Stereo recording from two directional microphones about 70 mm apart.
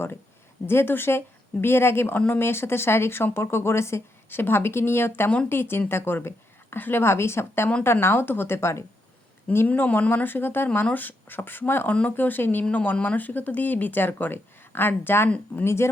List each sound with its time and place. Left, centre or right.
0.7 s a woman's voice: left
9.6 s a woman's voice: left